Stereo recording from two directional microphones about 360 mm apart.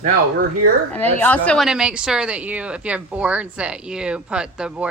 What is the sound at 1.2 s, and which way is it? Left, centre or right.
Speech, centre.